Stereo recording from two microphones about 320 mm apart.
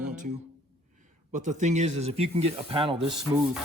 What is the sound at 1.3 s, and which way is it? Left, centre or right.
Speech, right.